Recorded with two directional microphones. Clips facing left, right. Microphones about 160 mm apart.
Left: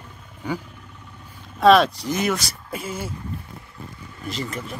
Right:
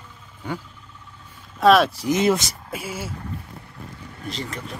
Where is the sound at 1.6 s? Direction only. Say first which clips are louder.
Left 1 dB; centre (ahead or behind).